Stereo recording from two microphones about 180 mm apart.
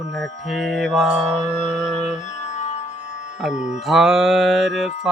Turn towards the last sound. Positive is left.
turn(degrees=0)  # may be behind; listen again after turning